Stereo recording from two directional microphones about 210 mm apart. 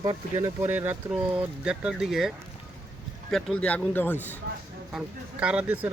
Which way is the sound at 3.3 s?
5° left (ahead or behind).